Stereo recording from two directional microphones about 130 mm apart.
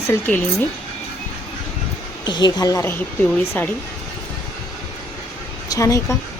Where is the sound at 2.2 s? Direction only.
35° left (ahead or behind).